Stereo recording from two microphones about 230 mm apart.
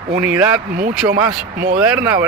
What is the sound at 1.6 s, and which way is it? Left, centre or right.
Speech, right.